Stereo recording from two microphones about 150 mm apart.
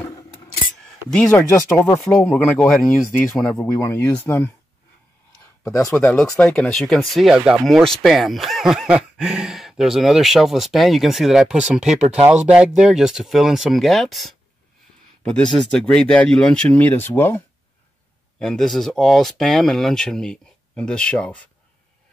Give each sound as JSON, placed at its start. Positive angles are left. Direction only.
{"t": 1.3, "sound": "speech", "side_deg": 15}
{"t": 3.8, "sound": "speech", "side_deg": 15}
{"t": 5.9, "sound": "speech", "side_deg": 10}
{"t": 18.4, "sound": "speech", "side_deg": 5}